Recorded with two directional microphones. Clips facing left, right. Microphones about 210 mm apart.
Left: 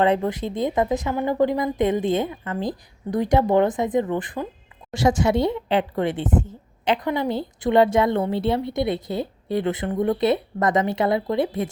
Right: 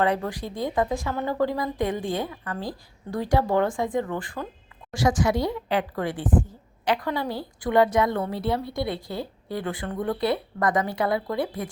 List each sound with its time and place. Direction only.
0.0 s a woman's voice: 25° left (ahead or behind)